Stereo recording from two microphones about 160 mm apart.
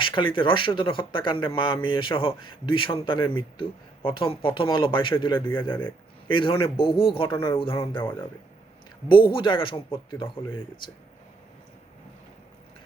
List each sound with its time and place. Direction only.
0.0 s speech: 30° left (ahead or behind)
9.0 s speech: 30° left (ahead or behind)